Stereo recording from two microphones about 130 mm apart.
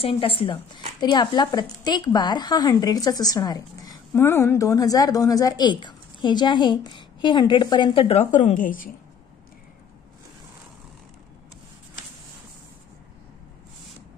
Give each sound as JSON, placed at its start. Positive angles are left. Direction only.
{"t": 0.0, "sound": "a woman's voice", "side_deg": 45}
{"t": 8.3, "sound": "a woman's voice", "side_deg": 75}